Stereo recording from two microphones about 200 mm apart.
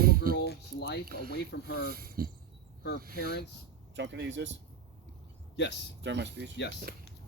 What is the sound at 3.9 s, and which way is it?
Speech, 60° right (ahead or behind).